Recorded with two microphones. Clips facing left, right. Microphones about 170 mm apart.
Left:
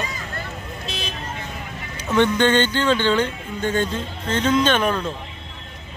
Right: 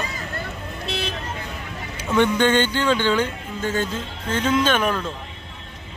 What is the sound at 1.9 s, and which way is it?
Speech, 10° right (ahead or behind).